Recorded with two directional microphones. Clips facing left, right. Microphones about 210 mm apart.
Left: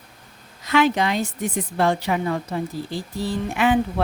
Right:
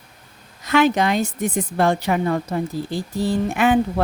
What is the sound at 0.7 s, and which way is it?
Speech, 45° right (ahead or behind).